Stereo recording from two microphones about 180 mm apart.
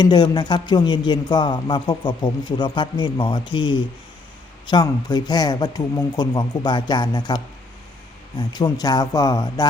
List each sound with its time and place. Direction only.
0.0 s a man's voice: 25° left (ahead or behind)